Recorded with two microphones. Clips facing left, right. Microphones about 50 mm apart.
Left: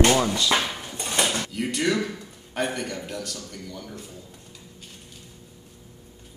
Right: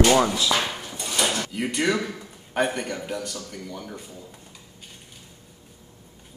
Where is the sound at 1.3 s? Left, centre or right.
Centre.